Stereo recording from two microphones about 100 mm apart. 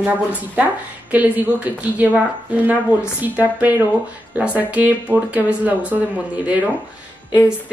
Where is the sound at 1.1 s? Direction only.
15° right (ahead or behind).